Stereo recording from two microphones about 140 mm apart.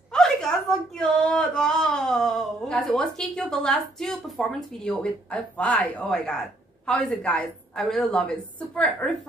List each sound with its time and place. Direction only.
0.1 s a woman's voice: 5° left (ahead or behind)